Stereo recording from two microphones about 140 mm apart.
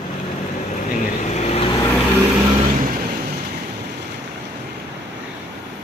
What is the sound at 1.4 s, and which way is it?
Vehicle, 50° left (ahead or behind).